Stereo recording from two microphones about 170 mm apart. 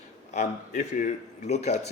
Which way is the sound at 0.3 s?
45° left (ahead or behind).